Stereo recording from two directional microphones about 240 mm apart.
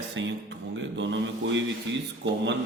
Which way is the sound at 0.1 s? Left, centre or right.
Right.